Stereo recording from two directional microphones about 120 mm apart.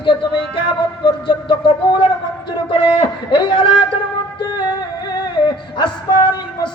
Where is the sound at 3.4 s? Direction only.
40° left (ahead or behind).